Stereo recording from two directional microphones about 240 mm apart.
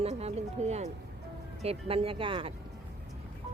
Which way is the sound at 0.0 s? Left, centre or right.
Right.